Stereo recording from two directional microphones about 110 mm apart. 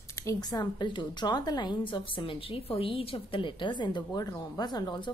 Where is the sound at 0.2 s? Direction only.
35° left (ahead or behind).